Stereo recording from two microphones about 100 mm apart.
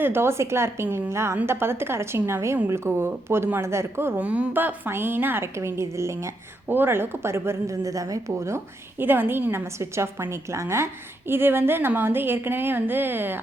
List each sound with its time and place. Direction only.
0.0 s speech: 25° right (ahead or behind)